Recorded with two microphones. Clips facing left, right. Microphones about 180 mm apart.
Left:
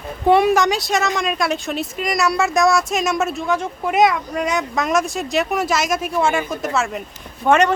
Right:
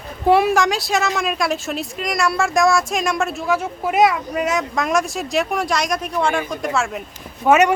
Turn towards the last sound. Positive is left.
turn(degrees=-10)  # may be behind; listen again after turning